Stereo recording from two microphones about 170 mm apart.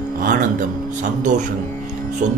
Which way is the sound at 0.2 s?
50° right (ahead or behind).